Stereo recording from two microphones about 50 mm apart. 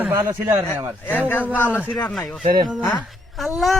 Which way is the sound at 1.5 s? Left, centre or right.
Left.